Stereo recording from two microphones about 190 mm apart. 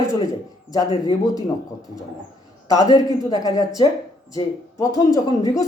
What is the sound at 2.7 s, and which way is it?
Speech, 20° left (ahead or behind).